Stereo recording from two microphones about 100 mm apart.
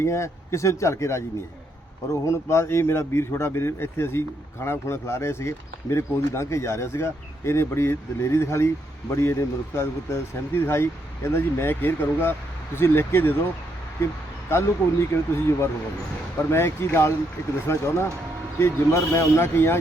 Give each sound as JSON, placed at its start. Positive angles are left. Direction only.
{"t": 0.0, "sound": "speech", "side_deg": 30}
{"t": 2.2, "sound": "speech", "side_deg": 30}